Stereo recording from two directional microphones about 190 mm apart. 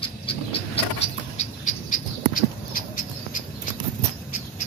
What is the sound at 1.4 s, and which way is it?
Rodents, 45° left (ahead or behind).